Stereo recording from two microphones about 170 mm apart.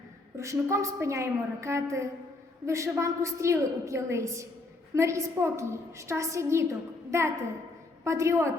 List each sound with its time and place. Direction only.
0.3 s a woman's voice: 15° right (ahead or behind)